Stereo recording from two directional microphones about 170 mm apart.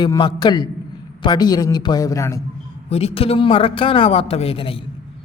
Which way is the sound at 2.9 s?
35° left (ahead or behind).